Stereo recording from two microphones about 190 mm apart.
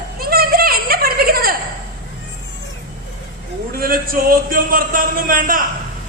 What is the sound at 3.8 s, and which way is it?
Speech, 50° right (ahead or behind).